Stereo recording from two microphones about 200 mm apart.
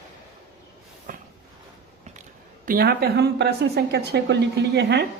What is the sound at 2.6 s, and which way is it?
A woman's voice, 50° right (ahead or behind).